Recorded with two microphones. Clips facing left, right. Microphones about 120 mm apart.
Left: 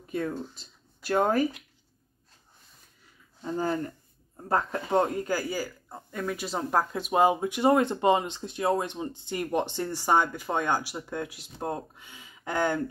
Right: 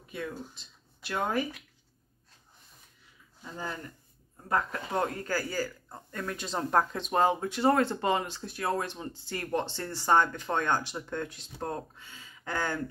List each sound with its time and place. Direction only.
0.6 s speech: 40° left (ahead or behind)
3.5 s speech: 40° left (ahead or behind)
4.5 s speech: 30° left (ahead or behind)